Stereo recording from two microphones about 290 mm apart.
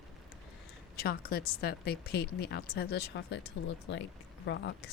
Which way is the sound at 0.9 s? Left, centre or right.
Left.